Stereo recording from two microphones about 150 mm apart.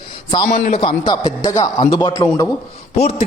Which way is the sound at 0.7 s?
35° left (ahead or behind).